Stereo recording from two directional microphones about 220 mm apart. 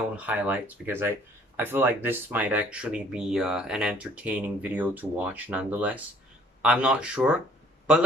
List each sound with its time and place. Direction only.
0.1 s speech: 5° right (ahead or behind)